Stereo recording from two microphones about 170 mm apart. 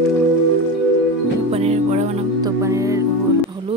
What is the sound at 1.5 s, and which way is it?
Music, 35° right (ahead or behind).